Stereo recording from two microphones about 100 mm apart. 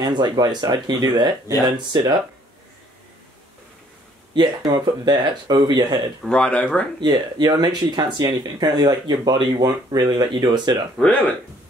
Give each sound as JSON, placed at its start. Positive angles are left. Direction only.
{"t": 0.0, "sound": "speech", "side_deg": -45}
{"t": 4.4, "sound": "speech", "side_deg": -45}
{"t": 6.2, "sound": "speech", "side_deg": 10}
{"t": 7.0, "sound": "speech", "side_deg": -45}
{"t": 11.0, "sound": "speech", "side_deg": 15}